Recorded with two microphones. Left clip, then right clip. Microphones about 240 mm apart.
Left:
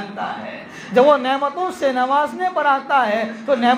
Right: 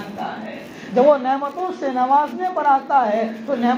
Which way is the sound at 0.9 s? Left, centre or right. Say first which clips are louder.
Left 1 dB; left.